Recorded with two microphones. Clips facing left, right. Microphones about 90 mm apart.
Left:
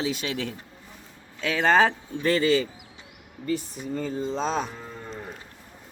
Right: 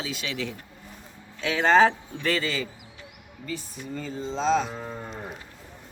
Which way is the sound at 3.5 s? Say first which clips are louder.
Left 5 dB; 50° left (ahead or behind).